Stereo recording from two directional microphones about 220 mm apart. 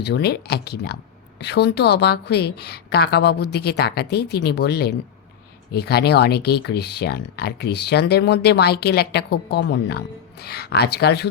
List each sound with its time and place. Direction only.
0.0 s speech: 50° left (ahead or behind)